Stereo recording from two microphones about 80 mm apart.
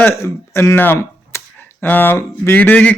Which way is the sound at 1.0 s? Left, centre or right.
Left.